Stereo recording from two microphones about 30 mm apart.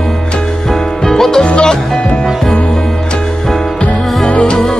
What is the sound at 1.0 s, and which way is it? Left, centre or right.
Music, centre.